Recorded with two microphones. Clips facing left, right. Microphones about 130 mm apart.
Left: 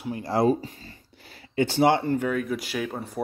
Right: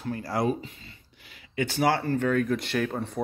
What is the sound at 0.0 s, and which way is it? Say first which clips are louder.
Speech: left 4 dB; 20° left (ahead or behind).